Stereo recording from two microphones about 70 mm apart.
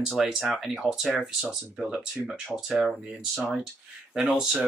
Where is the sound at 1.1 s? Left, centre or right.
Centre.